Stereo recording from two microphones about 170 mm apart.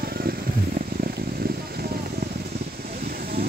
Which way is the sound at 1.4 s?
65° right (ahead or behind).